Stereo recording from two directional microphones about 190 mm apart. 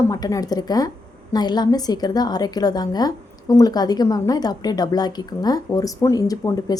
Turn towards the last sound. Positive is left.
turn(degrees=20)  # may be behind; listen again after turning